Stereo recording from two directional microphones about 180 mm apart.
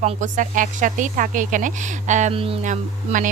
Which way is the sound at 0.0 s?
45° right (ahead or behind).